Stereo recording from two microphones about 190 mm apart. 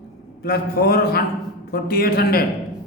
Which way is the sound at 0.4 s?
55° left (ahead or behind).